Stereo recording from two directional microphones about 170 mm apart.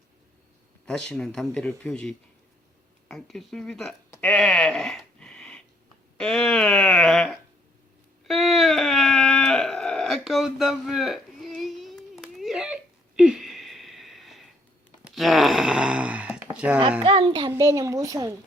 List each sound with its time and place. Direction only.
0.9 s speech: 5° left (ahead or behind)
4.1 s a sound: 5° left (ahead or behind)
6.1 s speech: 5° left (ahead or behind)
8.3 s a sound: centre (ahead or behind)
17.0 s a child's voice: 35° right (ahead or behind)
17.5 s speech: 20° right (ahead or behind)